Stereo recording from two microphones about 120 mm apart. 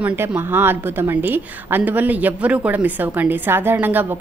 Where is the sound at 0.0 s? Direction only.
15° right (ahead or behind).